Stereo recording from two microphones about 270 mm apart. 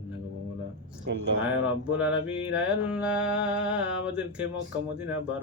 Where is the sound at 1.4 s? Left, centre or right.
Centre.